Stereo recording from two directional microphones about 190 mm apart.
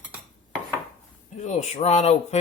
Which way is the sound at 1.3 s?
40° left (ahead or behind).